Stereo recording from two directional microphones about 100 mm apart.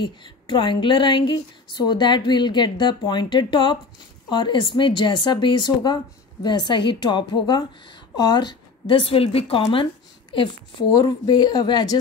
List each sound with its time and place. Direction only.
0.0 s a sound: 55° left (ahead or behind)
1.3 s a woman's voice: 45° left (ahead or behind); by 9.8 s 75° left (ahead or behind)
10.9 s speech: 40° left (ahead or behind)